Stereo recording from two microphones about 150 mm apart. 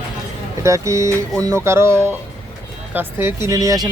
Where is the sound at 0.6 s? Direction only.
20° right (ahead or behind).